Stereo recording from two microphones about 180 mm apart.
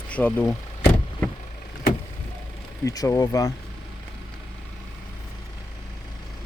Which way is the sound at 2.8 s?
20° left (ahead or behind).